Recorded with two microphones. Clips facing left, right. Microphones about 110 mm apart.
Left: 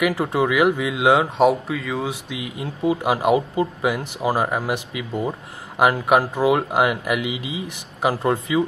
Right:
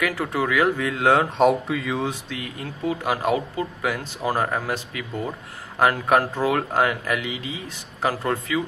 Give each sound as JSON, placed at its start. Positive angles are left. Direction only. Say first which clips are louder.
{"t": 0.0, "sound": "speech", "louder": "left 4 dB", "side_deg": 20}
{"t": 2.2, "sound": "speech", "louder": "left 3 dB", "side_deg": 15}